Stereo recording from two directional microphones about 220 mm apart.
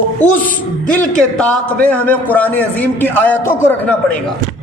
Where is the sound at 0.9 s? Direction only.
5° left (ahead or behind).